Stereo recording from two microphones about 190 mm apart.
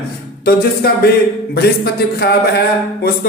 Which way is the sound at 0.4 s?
55° left (ahead or behind).